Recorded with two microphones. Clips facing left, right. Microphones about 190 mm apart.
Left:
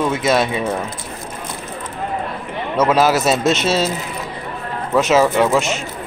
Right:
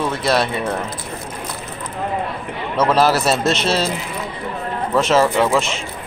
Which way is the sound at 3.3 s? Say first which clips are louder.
Left 2 dB; centre (ahead or behind).